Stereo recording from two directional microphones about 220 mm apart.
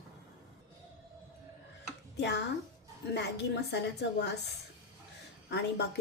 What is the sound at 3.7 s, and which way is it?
Speech, 50° left (ahead or behind).